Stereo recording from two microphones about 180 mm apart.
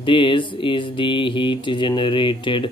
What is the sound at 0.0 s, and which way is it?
Speech, 30° left (ahead or behind).